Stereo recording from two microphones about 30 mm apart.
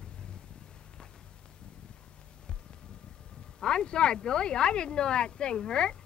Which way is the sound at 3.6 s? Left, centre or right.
Left.